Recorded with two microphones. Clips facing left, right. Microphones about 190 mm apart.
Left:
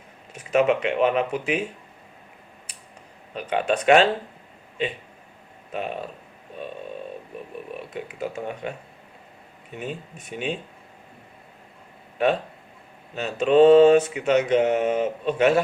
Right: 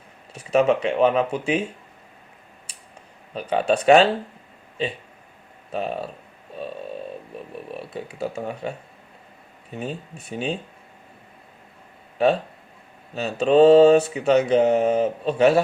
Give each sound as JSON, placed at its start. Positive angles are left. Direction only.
{"t": 0.3, "sound": "mantra", "side_deg": -35}
{"t": 3.3, "sound": "mantra", "side_deg": -35}
{"t": 5.7, "sound": "mantra", "side_deg": -35}
{"t": 7.7, "sound": "mantra", "side_deg": -30}
{"t": 9.7, "sound": "mantra", "side_deg": -35}
{"t": 12.1, "sound": "speech", "side_deg": -30}
{"t": 13.1, "sound": "mantra", "side_deg": -35}